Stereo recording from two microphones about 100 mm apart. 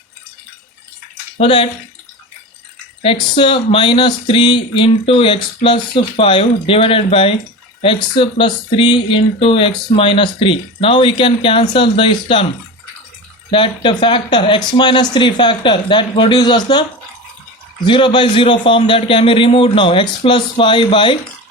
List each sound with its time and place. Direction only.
1.4 s speech: 60° left (ahead or behind)
3.0 s speech: 60° left (ahead or behind)
13.5 s speech: 55° left (ahead or behind)
17.8 s speech: 55° left (ahead or behind)